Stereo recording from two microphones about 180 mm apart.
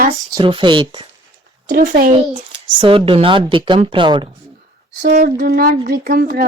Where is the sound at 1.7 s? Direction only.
50° right (ahead or behind).